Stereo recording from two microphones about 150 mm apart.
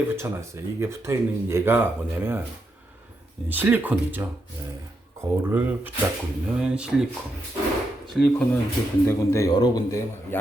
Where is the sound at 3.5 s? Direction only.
10° right (ahead or behind).